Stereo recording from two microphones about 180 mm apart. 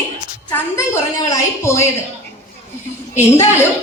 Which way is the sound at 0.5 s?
15° left (ahead or behind).